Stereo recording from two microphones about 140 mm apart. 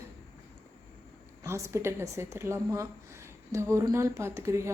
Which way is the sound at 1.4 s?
20° right (ahead or behind).